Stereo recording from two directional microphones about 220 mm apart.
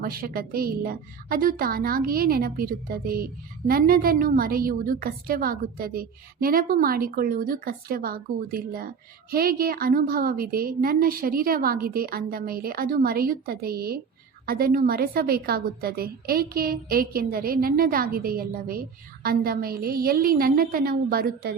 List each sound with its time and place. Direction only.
0.0 s a woman's voice: 40° right (ahead or behind)